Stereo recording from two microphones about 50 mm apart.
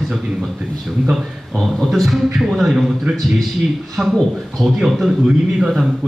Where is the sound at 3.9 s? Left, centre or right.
Centre.